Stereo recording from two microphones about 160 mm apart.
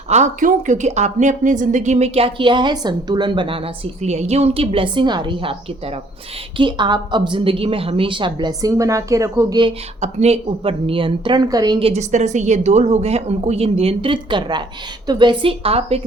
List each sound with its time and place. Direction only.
0.1 s a woman's voice: 50° right (ahead or behind); by 9.7 s 25° right (ahead or behind)
10.0 s a woman's voice: 40° right (ahead or behind)